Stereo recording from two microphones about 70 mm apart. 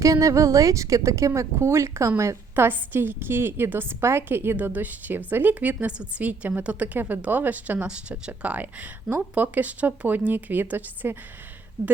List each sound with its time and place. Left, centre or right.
0.0 s a woman's voice: right